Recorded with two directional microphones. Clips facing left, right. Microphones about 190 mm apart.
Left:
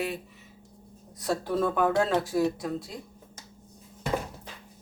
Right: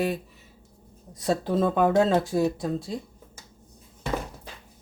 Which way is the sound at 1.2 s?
20° right (ahead or behind).